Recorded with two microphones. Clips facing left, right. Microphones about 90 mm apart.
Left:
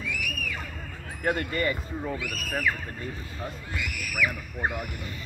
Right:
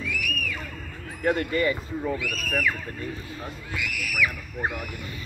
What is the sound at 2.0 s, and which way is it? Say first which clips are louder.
Speech: right 5 dB; 5° left (ahead or behind).